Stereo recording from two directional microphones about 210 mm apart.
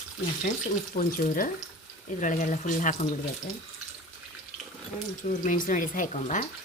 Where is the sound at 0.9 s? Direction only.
45° left (ahead or behind).